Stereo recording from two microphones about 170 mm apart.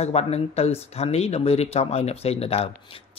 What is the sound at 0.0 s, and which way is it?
Speech, 40° left (ahead or behind).